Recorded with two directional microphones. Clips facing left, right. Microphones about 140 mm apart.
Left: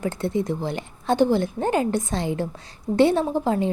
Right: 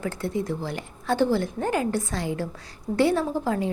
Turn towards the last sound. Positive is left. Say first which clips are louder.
# left 3 dB
turn(degrees=25)  # may be behind; listen again after turning